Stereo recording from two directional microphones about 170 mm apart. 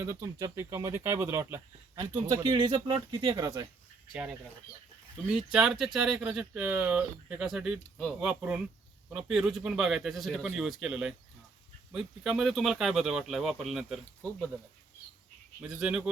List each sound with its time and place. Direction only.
0.0 s speech: 15° right (ahead or behind)
4.1 s speech: 5° right (ahead or behind)
15.6 s speech: 5° right (ahead or behind)